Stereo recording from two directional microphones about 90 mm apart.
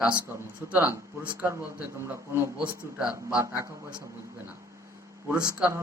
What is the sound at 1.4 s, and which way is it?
A man's voice, 30° right (ahead or behind).